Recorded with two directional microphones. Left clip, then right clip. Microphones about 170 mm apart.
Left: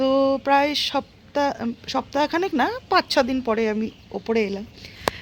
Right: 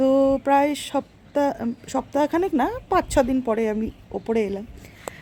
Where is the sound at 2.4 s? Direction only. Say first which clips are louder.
Even; centre (ahead or behind); by 4.6 s 15° right (ahead or behind).